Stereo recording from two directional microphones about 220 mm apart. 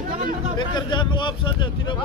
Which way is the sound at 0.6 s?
20° left (ahead or behind).